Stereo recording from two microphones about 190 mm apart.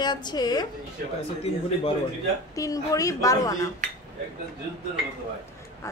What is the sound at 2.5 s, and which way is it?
A woman's voice, 15° left (ahead or behind).